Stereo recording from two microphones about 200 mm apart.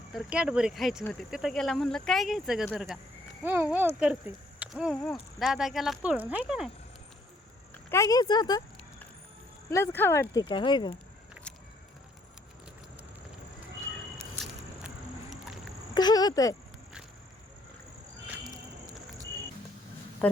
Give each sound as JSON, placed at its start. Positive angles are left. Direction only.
{"t": 0.1, "sound": "speech", "side_deg": -5}
{"t": 7.7, "sound": "speech", "side_deg": 15}
{"t": 9.6, "sound": "speech", "side_deg": 15}
{"t": 10.5, "sound": "speech", "side_deg": 25}
{"t": 14.8, "sound": "music", "side_deg": 0}
{"t": 16.0, "sound": "speech", "side_deg": 20}
{"t": 20.2, "sound": "speech", "side_deg": 5}